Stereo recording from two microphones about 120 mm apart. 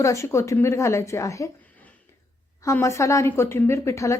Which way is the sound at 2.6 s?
25° left (ahead or behind).